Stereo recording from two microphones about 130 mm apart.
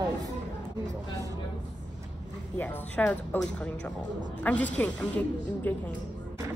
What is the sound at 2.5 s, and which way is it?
Speech, 10° left (ahead or behind).